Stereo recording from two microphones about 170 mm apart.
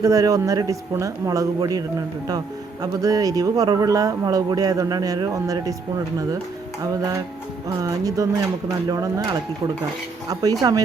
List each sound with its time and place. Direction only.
0.0 s a man's voice: 20° right (ahead or behind)
7.8 s a man's voice: 20° right (ahead or behind)
10.2 s a man's voice: 20° right (ahead or behind)